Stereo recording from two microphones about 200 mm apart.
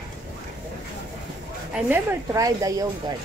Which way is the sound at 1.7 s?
15° right (ahead or behind).